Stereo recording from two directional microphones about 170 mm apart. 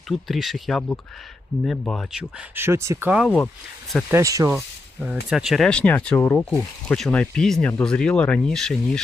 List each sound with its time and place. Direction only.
0.1 s speech: centre (ahead or behind)
2.6 s speech: 15° right (ahead or behind)
3.2 s speech: 5° left (ahead or behind)
4.1 s speech: 20° right (ahead or behind)
4.5 s speech: 5° right (ahead or behind)